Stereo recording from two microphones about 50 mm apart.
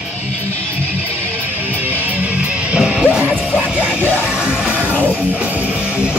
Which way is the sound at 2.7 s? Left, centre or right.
Centre.